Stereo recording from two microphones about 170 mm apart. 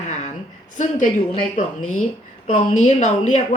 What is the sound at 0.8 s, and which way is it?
Speech, 45° left (ahead or behind).